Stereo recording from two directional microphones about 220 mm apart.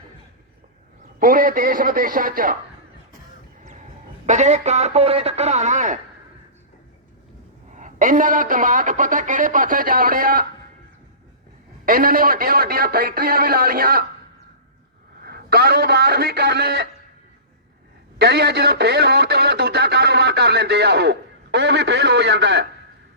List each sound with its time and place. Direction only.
1.2 s speech: 40° right (ahead or behind)
4.3 s speech: 30° right (ahead or behind)
7.8 s speech: 35° right (ahead or behind)
11.9 s speech: 40° right (ahead or behind)
15.2 s a man's voice: 45° right (ahead or behind)
18.2 s speech: 45° right (ahead or behind)